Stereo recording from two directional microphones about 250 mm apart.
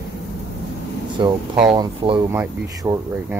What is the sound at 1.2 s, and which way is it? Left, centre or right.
Speech, centre.